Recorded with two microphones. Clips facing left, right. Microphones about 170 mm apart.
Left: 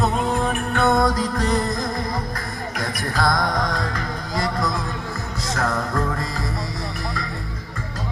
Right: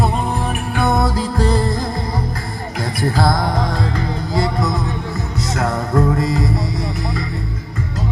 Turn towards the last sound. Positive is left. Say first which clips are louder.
# right 8 dB
turn(degrees=-25)  # may be behind; listen again after turning